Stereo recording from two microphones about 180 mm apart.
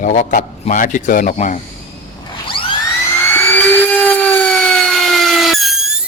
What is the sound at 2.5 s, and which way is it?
Music, 30° left (ahead or behind).